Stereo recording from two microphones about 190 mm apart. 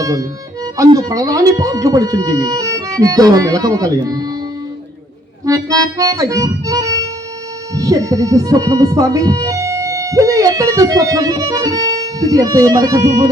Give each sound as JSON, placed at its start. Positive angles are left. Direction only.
{"t": 0.0, "sound": "speech", "side_deg": -20}
{"t": 5.5, "sound": "speech", "side_deg": -20}